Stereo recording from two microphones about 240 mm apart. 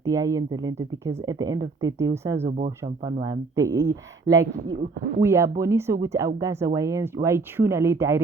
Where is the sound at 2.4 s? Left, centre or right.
Right.